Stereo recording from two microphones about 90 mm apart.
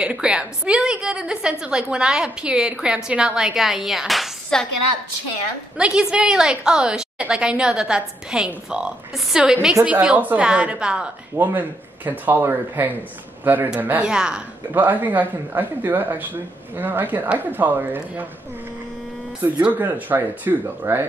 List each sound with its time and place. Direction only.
0.0 s a woman's voice: 10° right (ahead or behind)
5.8 s a woman's voice: 10° right (ahead or behind)
14.7 s a woman's voice: 20° right (ahead or behind)
19.4 s a woman's voice: 20° right (ahead or behind)